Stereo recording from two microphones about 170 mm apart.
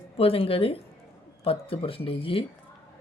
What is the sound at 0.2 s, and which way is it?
Speech, 35° left (ahead or behind).